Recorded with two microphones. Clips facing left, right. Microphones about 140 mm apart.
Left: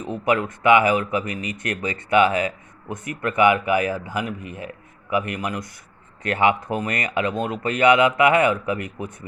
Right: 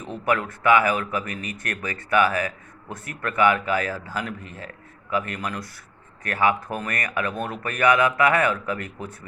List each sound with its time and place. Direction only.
0.0 s a man's voice: 15° left (ahead or behind)